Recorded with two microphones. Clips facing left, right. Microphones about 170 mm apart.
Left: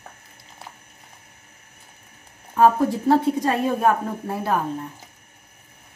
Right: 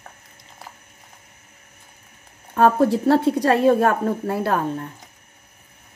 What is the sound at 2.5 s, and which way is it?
A woman's voice, 75° right (ahead or behind).